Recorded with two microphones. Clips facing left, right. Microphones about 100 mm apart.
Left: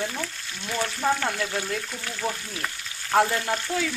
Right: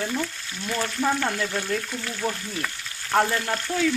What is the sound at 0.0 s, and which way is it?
Speech, centre (ahead or behind).